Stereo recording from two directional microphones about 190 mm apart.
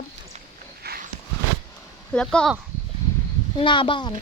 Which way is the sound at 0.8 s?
55° right (ahead or behind).